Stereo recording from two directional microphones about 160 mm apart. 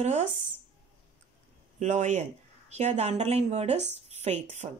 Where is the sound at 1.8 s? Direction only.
50° right (ahead or behind).